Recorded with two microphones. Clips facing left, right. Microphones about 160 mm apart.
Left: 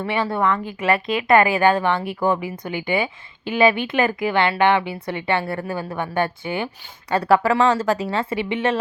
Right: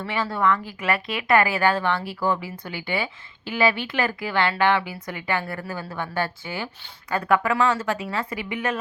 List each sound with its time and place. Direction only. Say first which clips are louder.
0.0 s speech: left 3 dB; 20° left (ahead or behind)
7.1 s speech: left 5 dB; 35° left (ahead or behind)